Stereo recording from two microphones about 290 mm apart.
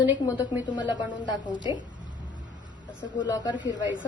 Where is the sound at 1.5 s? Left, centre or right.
Centre.